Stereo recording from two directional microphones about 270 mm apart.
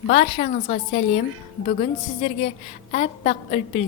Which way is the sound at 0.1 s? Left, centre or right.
Left.